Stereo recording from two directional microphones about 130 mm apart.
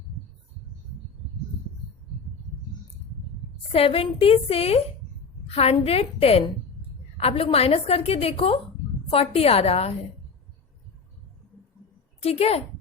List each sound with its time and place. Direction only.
3.7 s a woman's voice: 45° left (ahead or behind)
12.2 s a woman's voice: 50° left (ahead or behind)